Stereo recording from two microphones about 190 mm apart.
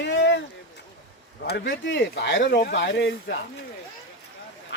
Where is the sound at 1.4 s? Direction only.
65° left (ahead or behind).